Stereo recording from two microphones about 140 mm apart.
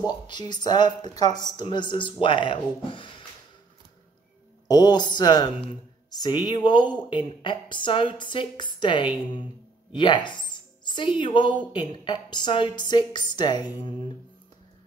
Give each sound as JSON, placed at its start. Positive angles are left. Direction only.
{"t": 0.3, "sound": "speech", "side_deg": 30}
{"t": 4.6, "sound": "speech", "side_deg": 30}
{"t": 9.9, "sound": "music", "side_deg": 35}
{"t": 11.1, "sound": "speech", "side_deg": 35}